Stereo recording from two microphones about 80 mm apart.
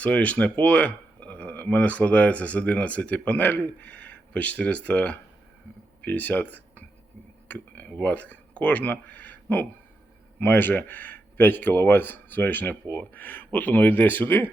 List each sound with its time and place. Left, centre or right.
0.0 s speech: centre